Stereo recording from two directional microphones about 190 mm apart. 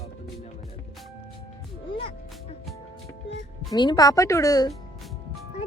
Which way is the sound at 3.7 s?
20° left (ahead or behind).